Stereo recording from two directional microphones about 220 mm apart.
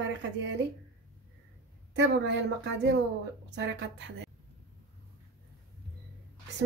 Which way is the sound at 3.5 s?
50° right (ahead or behind).